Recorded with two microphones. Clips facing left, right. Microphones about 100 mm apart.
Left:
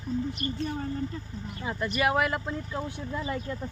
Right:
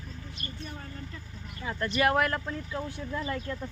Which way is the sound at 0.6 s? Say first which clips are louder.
Left 11 dB; 30° left (ahead or behind).